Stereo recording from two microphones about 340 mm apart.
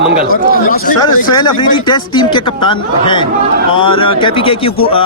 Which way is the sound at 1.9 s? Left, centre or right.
Centre.